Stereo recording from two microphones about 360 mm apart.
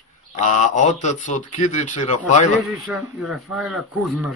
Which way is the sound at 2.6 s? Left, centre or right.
Centre.